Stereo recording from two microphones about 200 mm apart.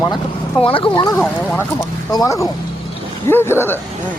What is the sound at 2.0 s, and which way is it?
Speech, 15° left (ahead or behind).